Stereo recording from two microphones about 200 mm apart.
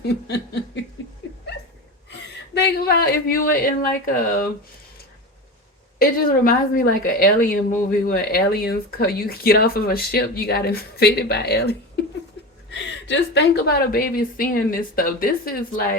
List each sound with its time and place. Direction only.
2.6 s a woman's voice: 50° left (ahead or behind)
6.0 s a woman's voice: 45° left (ahead or behind)